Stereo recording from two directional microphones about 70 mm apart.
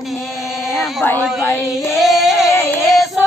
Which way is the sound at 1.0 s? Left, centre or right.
Left.